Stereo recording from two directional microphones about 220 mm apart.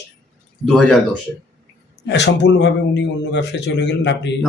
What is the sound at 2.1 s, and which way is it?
Speech, 55° left (ahead or behind).